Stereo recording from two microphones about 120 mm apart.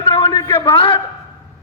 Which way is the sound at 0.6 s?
45° left (ahead or behind).